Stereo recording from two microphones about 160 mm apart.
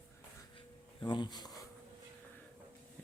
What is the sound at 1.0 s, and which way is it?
Speech, 30° left (ahead or behind).